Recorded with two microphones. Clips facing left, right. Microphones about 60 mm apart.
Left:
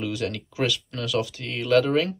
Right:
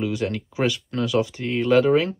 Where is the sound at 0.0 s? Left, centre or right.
Right.